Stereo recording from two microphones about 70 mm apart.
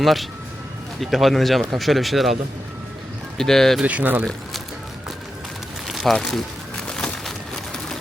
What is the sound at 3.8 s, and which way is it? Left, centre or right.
Speech, centre.